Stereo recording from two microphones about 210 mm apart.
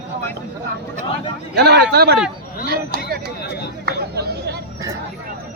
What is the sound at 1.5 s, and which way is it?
Speech, 50° right (ahead or behind).